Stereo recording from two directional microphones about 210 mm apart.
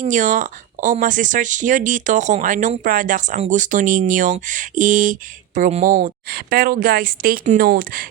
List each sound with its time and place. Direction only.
0.0 s a woman's voice: 35° right (ahead or behind)